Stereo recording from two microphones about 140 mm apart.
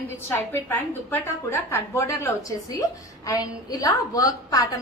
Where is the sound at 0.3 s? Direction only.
15° left (ahead or behind).